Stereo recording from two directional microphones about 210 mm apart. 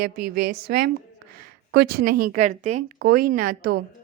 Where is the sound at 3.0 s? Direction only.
45° right (ahead or behind).